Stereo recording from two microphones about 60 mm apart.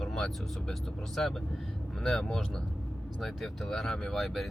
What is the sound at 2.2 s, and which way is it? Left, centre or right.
Speech, centre.